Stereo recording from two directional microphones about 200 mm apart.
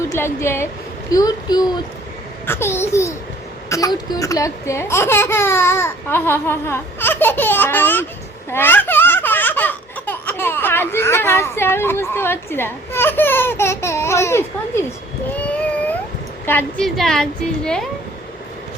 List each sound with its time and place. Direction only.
0.1 s a child's voice: 15° left (ahead or behind)
15.4 s a sound: 5° left (ahead or behind)
16.5 s a woman's voice: 10° left (ahead or behind)